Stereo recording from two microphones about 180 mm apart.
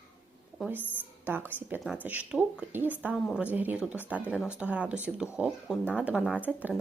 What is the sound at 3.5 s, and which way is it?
Speech, 10° right (ahead or behind).